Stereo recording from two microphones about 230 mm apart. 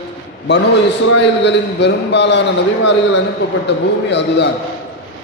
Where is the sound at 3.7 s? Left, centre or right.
Left.